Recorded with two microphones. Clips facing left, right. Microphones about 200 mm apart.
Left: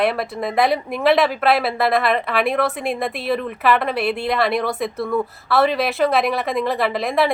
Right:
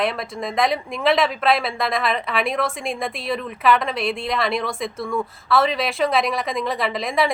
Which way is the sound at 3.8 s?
60° left (ahead or behind).